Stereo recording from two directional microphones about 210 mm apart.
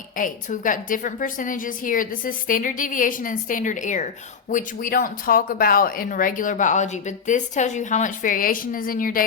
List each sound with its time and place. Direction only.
0.2 s a woman's voice: 40° left (ahead or behind)